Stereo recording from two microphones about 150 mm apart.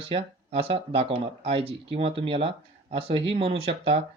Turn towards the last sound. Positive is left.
turn(degrees=-40)  # may be behind; listen again after turning